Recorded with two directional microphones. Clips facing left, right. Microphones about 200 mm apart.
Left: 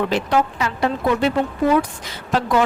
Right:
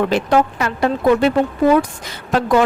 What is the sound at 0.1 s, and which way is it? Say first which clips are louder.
A woman's voice: right 4 dB; 50° right (ahead or behind).